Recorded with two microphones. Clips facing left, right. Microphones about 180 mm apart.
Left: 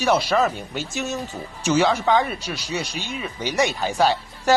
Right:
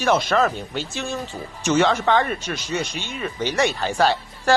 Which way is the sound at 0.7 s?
45° left (ahead or behind).